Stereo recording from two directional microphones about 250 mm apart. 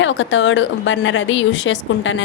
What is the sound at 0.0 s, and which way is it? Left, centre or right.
A woman's voice, left.